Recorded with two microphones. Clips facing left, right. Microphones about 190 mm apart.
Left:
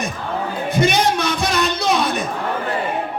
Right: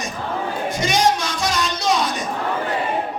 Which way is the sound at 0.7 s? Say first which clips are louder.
Left 2 dB; 60° left (ahead or behind).